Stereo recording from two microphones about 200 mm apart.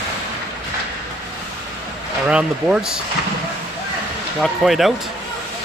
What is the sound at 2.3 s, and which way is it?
Speech, 5° right (ahead or behind).